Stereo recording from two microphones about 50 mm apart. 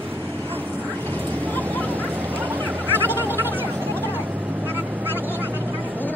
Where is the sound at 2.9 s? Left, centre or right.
Right.